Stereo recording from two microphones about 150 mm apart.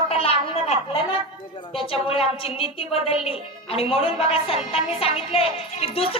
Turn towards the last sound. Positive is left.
turn(degrees=40)  # may be behind; listen again after turning